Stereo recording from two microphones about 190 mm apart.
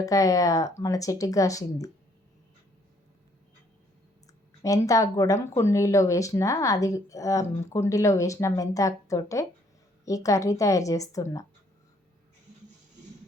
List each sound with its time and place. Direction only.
0.0 s speech: 15° left (ahead or behind)
4.6 s speech: 15° left (ahead or behind)